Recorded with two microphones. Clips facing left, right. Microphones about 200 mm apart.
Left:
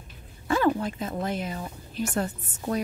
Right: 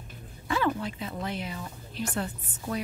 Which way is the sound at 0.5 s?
45° left (ahead or behind).